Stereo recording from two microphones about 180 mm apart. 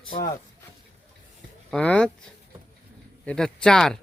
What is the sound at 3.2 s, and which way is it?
Speech, 5° left (ahead or behind).